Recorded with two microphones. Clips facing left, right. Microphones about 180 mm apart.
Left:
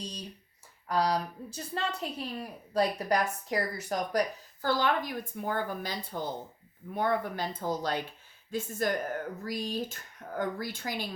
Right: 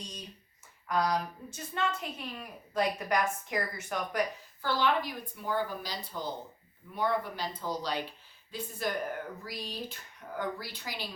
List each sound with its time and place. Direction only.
0.9 s a woman's voice: 35° left (ahead or behind)